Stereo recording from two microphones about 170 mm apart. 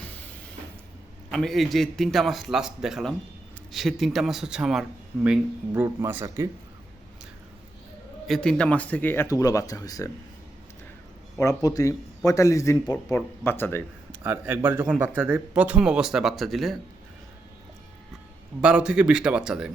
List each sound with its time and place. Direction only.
1.3 s speech: centre (ahead or behind); by 6.5 s 15° right (ahead or behind)
8.3 s speech: 5° left (ahead or behind); by 10.1 s 20° left (ahead or behind)
11.3 s a man's voice: 20° left (ahead or behind)
14.1 s speech: 10° right (ahead or behind)
18.6 s speech: 5° right (ahead or behind)